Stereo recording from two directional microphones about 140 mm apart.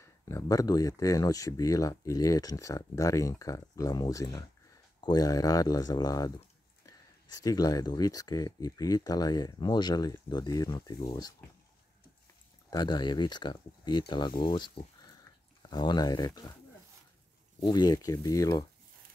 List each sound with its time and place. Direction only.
0.0 s speech: 20° left (ahead or behind)
12.6 s speech: 30° left (ahead or behind)
17.6 s speech: 30° left (ahead or behind)